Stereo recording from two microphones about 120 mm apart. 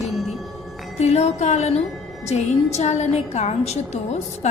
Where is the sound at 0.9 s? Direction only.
65° left (ahead or behind).